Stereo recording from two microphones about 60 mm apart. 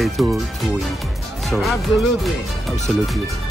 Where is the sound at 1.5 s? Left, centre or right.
Centre.